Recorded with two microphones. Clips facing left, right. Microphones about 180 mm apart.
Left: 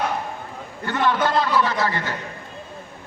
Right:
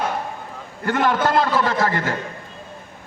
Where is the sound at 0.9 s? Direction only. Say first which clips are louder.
Right 2 dB; 45° right (ahead or behind).